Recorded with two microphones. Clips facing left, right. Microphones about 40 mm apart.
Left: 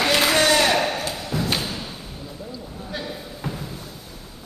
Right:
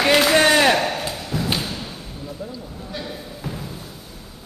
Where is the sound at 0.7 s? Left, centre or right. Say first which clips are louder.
Right 1 dB; centre.